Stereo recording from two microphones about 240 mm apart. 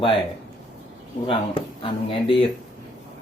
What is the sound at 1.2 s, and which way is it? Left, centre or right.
Speech, left.